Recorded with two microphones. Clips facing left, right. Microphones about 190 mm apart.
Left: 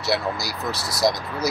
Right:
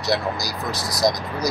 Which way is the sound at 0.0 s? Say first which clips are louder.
Right 1 dB; 5° left (ahead or behind).